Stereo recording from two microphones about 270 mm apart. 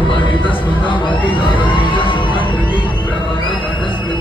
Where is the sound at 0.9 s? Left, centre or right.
Centre.